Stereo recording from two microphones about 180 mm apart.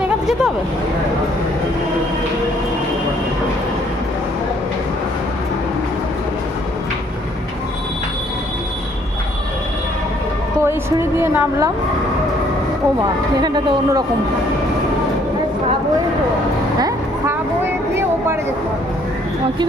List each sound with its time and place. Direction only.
10.6 s a woman's voice: 15° right (ahead or behind)
13.4 s a man's voice: 25° right (ahead or behind)